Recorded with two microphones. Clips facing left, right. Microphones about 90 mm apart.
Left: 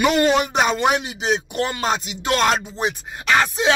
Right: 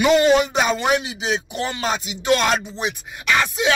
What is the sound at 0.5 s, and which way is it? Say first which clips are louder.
Music: left 1 dB; 45° left (ahead or behind).